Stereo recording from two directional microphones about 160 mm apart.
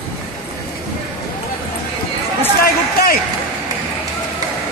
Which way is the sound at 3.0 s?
75° left (ahead or behind).